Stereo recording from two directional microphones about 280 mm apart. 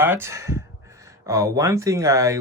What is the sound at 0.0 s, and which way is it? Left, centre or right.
Speech, centre.